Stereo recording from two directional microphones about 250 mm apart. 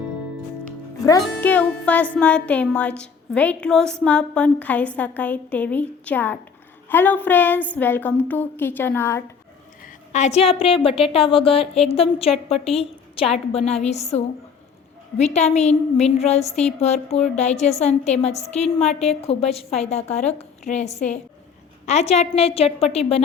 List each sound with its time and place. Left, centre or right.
1.2 s music: centre
6.8 s a woman's voice: centre
9.8 s a woman's voice: left